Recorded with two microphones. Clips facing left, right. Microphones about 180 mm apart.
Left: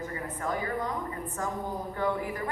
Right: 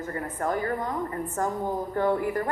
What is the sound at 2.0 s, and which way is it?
Speech, 50° right (ahead or behind).